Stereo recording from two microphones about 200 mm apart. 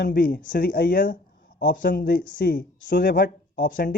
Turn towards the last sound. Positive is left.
turn(degrees=45)  # may be behind; listen again after turning